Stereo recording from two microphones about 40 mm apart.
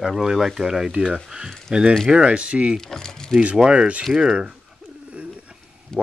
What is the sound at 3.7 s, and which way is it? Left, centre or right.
Speech, right.